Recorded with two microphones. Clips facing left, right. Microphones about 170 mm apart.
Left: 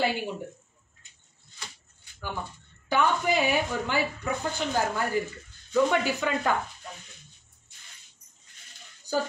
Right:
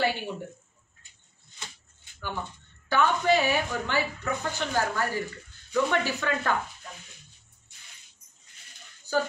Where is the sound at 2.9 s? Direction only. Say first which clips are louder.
Right 1 dB; 15° left (ahead or behind).